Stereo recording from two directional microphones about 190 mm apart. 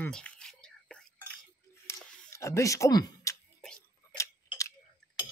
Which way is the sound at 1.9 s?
15° left (ahead or behind).